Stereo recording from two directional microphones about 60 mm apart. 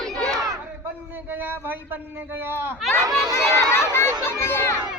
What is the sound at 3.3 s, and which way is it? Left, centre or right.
Speech, left.